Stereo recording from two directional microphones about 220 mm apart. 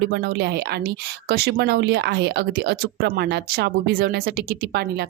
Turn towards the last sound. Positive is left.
turn(degrees=-45)  # may be behind; listen again after turning